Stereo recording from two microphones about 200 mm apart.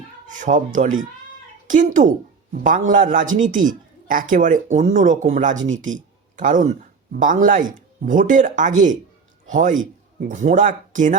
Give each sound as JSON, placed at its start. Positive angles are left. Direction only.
{"t": 0.3, "sound": "speech", "side_deg": -40}